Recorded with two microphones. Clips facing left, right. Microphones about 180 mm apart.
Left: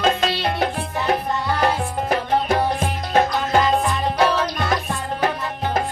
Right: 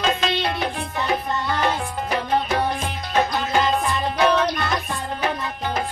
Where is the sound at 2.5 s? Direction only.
50° left (ahead or behind).